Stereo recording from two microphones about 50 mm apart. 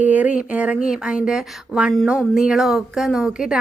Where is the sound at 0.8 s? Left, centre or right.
Centre.